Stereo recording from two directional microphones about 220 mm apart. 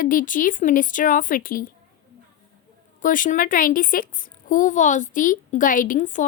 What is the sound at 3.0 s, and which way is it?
A woman's voice, 35° left (ahead or behind).